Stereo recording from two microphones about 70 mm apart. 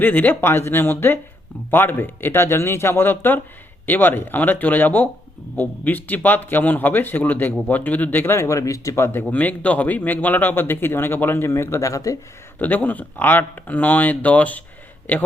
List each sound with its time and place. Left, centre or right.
0.0 s speech: left
9.3 s speech: left
12.5 s speech: left